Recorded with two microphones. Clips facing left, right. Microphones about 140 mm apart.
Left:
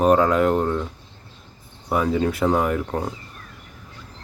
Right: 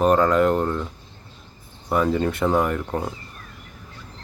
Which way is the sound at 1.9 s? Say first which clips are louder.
Even; 5° left (ahead or behind).